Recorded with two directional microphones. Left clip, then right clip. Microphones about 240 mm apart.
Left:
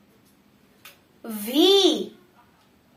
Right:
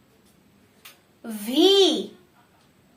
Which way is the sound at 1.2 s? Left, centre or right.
Left.